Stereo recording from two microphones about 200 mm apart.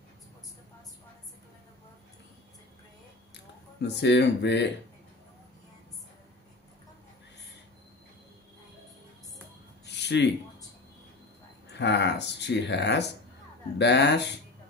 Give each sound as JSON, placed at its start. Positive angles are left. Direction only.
{"t": 3.3, "sound": "speech", "side_deg": 60}
{"t": 9.8, "sound": "a sound", "side_deg": 60}
{"t": 11.7, "sound": "speech", "side_deg": 60}